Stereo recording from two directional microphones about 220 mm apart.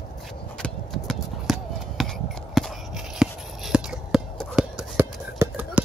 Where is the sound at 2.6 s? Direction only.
Centre (ahead or behind).